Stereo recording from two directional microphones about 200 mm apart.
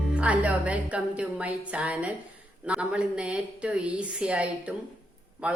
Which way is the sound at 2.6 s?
5° right (ahead or behind).